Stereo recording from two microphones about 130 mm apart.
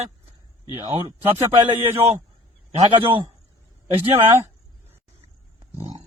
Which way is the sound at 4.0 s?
20° right (ahead or behind).